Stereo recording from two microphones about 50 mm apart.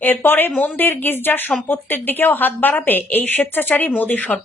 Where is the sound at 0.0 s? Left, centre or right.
Left.